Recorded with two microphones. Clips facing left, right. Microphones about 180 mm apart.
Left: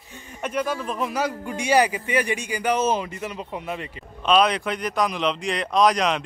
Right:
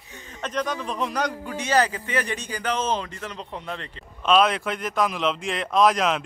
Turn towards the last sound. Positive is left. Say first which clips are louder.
# even
turn(degrees=0)  # may be behind; listen again after turning